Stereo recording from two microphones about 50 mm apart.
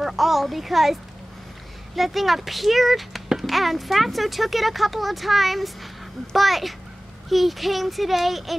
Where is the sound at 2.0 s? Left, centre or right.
Centre.